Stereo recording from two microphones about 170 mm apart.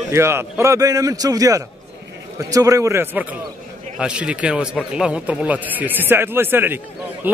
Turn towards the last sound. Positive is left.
turn(degrees=-10)  # may be behind; listen again after turning